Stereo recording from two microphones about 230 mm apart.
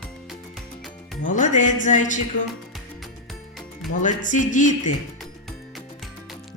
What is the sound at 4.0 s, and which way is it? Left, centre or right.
Speech, left.